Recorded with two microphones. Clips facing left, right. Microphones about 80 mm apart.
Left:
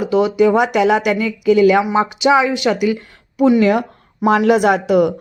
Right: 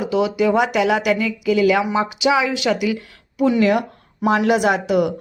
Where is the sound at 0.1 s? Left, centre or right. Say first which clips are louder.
Left 5 dB; left.